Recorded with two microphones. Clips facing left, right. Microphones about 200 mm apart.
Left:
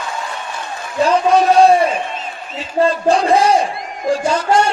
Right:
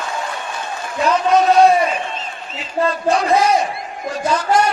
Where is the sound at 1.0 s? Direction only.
30° left (ahead or behind).